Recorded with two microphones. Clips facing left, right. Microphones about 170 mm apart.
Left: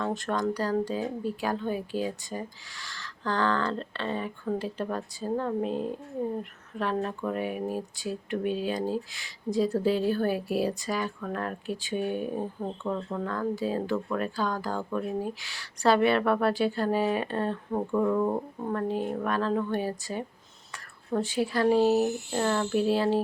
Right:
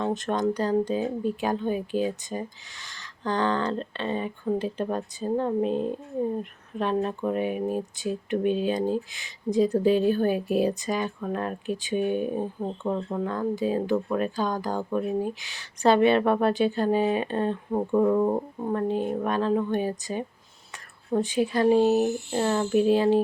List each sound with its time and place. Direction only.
0.0 s speech: 20° right (ahead or behind)